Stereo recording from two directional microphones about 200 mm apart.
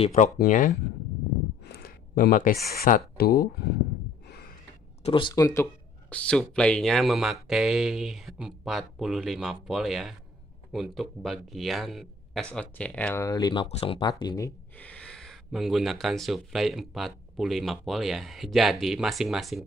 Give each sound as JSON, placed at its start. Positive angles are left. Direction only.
{"t": 0.0, "sound": "speech", "side_deg": 35}
{"t": 1.6, "sound": "speech", "side_deg": 50}
{"t": 5.0, "sound": "speech", "side_deg": 25}
{"t": 14.8, "sound": "speech", "side_deg": 5}